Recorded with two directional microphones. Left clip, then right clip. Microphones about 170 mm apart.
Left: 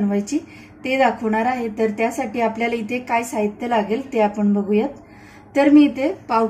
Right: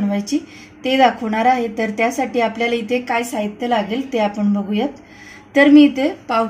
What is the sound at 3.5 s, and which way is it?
Speech, 40° right (ahead or behind).